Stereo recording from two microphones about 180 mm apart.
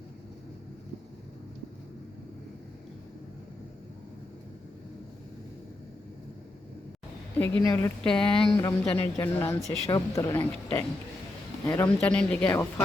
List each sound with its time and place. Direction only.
7.3 s speech: 10° left (ahead or behind)
8.0 s speech: 5° left (ahead or behind)